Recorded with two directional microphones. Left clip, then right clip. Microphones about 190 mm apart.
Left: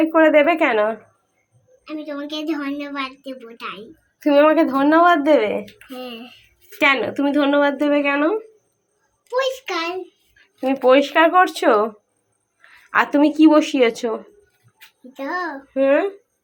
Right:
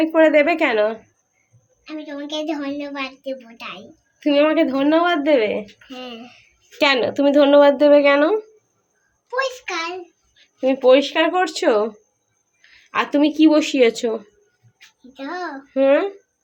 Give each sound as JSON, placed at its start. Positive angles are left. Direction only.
{"t": 0.0, "sound": "a woman's voice", "side_deg": -5}
{"t": 4.6, "sound": "a woman's voice", "side_deg": -5}
{"t": 6.7, "sound": "speech", "side_deg": -25}
{"t": 9.3, "sound": "a woman's voice", "side_deg": -10}
{"t": 12.9, "sound": "a woman's voice", "side_deg": -5}